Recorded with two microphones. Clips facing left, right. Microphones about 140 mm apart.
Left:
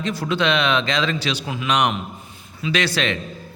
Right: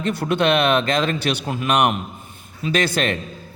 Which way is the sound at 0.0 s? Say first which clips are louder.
Right 2 dB; 55° right (ahead or behind).